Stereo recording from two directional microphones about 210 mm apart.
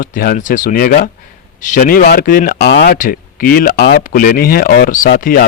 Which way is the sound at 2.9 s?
40° left (ahead or behind).